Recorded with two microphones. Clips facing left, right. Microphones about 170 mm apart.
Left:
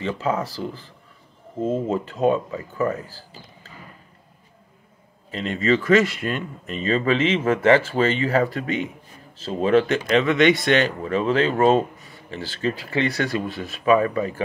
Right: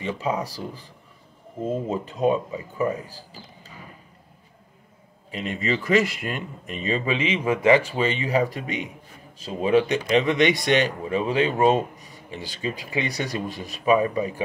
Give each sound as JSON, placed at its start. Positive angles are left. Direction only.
{"t": 0.0, "sound": "speech", "side_deg": -15}
{"t": 1.9, "sound": "speech", "side_deg": -15}
{"t": 5.3, "sound": "speech", "side_deg": -15}